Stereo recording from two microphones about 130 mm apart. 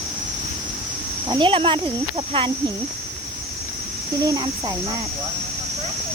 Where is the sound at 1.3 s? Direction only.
40° right (ahead or behind).